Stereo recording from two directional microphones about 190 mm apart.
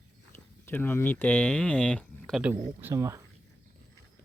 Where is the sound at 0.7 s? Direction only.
10° left (ahead or behind).